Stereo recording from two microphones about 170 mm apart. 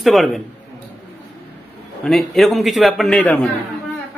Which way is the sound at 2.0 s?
Centre (ahead or behind).